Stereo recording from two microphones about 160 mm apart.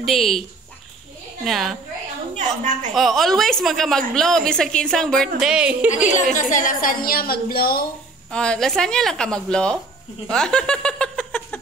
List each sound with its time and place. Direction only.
0.0 s a woman's voice: centre (ahead or behind)
2.3 s a woman's voice: 50° right (ahead or behind)
2.9 s a woman's voice: centre (ahead or behind)
6.3 s a woman's voice: 55° left (ahead or behind); by 7.8 s 70° left (ahead or behind)
8.3 s a woman's voice: 5° left (ahead or behind)